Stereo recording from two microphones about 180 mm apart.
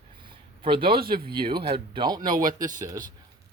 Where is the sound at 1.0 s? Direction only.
55° right (ahead or behind).